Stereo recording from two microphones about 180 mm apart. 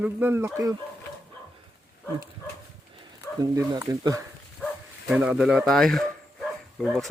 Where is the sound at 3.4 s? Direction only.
20° right (ahead or behind).